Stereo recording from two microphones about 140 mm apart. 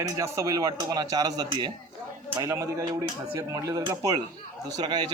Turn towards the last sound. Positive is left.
turn(degrees=-30)  # may be behind; listen again after turning